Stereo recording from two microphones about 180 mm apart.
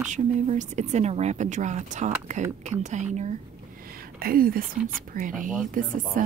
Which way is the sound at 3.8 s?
55° right (ahead or behind).